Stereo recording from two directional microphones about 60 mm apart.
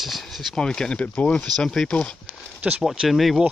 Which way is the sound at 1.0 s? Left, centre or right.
Left.